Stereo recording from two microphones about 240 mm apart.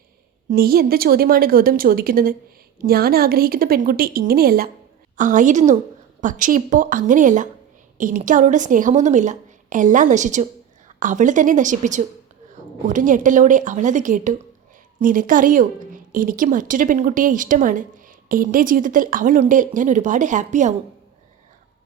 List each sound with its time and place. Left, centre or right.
0.5 s speech: right